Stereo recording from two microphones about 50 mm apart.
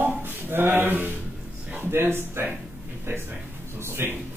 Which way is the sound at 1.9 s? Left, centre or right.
Right.